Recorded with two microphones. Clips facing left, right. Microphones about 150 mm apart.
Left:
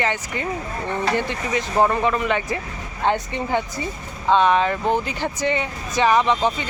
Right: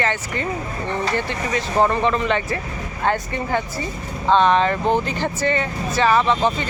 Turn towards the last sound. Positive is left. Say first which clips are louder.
# right 1 dB
turn(degrees=15)  # may be behind; listen again after turning